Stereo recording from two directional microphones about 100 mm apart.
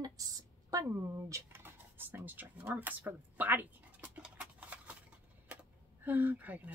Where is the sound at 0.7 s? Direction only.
35° right (ahead or behind); by 4.9 s 10° right (ahead or behind).